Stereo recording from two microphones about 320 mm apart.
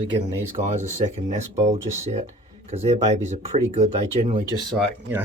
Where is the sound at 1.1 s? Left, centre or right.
Right.